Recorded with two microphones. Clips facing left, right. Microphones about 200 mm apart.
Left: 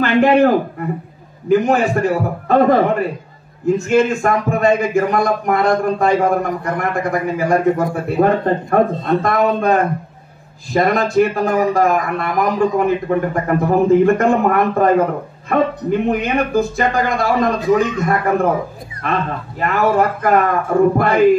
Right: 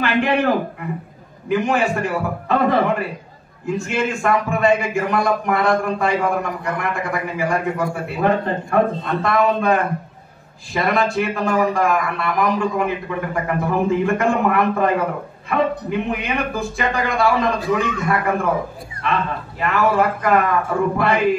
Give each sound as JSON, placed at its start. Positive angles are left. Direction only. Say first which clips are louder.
{"t": 0.0, "sound": "a man's voice", "louder": "left 6 dB", "side_deg": 40}